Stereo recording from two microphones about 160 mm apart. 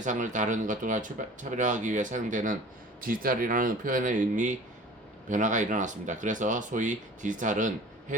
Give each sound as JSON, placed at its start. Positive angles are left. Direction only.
{"t": 0.0, "sound": "speech", "side_deg": -50}